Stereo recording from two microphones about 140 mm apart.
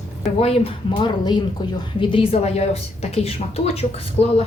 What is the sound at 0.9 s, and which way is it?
A woman's voice, 30° left (ahead or behind).